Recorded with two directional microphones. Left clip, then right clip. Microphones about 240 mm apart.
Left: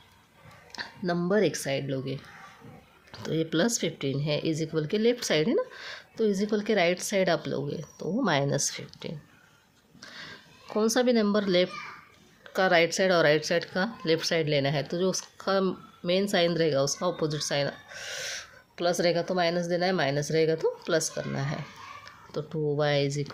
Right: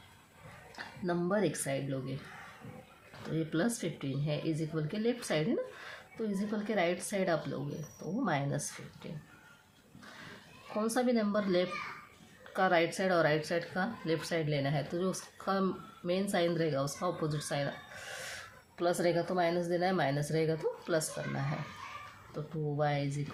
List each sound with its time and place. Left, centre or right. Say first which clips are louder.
0.8 s speech: left 5 dB; left
10.8 s speech: left 7 dB; left